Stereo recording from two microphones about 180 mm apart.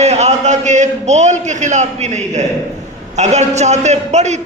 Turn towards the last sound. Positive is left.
turn(degrees=-40)  # may be behind; listen again after turning